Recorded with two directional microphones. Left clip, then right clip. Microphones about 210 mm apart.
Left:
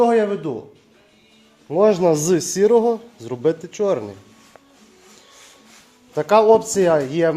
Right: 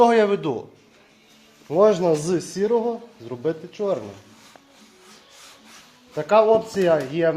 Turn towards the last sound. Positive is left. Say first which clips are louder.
# left 3 dB
turn(degrees=35)  # may be behind; listen again after turning